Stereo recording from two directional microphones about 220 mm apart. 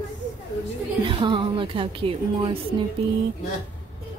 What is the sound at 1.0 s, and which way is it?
Speech, 20° right (ahead or behind).